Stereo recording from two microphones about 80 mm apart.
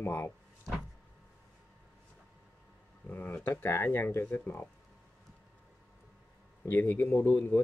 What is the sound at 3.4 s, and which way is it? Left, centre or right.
Speech, left.